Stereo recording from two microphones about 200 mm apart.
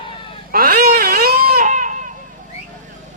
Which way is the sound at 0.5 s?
45° right (ahead or behind).